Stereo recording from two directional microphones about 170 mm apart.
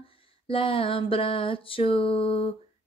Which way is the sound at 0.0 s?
35° left (ahead or behind).